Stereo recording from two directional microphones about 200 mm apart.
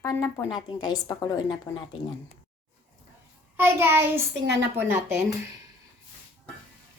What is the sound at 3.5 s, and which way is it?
Child singing, 10° right (ahead or behind).